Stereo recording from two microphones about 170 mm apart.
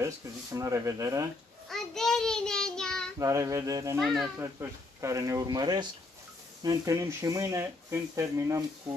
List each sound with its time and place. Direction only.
0.0 s speech: 20° right (ahead or behind)
1.7 s child singing: 5° left (ahead or behind)
3.2 s speech: 20° right (ahead or behind)
4.0 s speech: centre (ahead or behind)
4.4 s speech: 15° right (ahead or behind)